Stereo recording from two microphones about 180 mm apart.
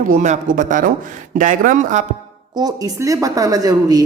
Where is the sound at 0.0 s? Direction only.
45° right (ahead or behind).